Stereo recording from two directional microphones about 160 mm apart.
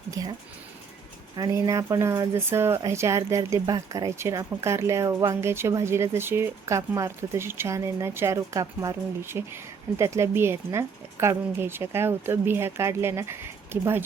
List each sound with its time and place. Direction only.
0.2 s speech: 20° right (ahead or behind)
1.4 s speech: 20° right (ahead or behind)